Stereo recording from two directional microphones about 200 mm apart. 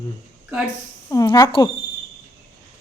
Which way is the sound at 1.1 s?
20° left (ahead or behind).